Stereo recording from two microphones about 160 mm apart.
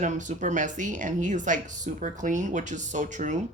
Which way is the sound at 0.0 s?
50° right (ahead or behind).